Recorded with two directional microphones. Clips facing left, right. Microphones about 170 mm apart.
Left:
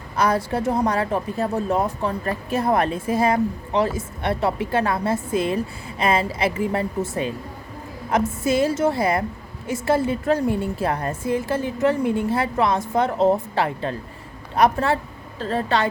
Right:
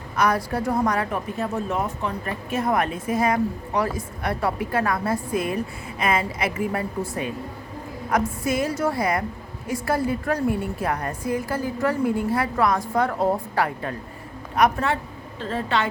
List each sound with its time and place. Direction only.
0.2 s a woman's voice: 25° left (ahead or behind)